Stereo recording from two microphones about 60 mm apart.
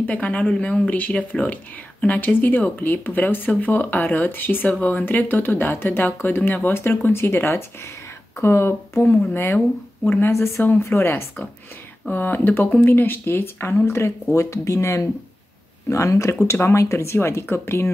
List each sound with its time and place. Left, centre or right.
0.0 s speech: left
10.3 s speech: left
12.1 s speech: left
14.3 s speech: left